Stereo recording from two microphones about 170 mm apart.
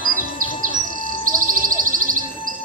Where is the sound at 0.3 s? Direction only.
50° right (ahead or behind).